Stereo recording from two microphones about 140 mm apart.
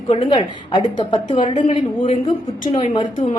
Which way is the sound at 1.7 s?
55° left (ahead or behind).